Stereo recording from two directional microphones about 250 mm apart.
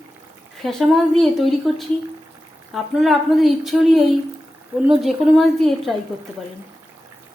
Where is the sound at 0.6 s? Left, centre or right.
Centre.